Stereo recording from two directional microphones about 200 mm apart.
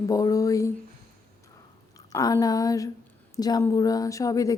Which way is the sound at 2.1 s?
20° left (ahead or behind).